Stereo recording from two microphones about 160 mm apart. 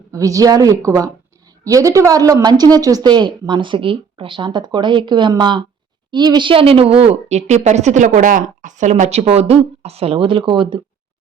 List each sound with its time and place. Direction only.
0.1 s a woman's voice: 20° right (ahead or behind)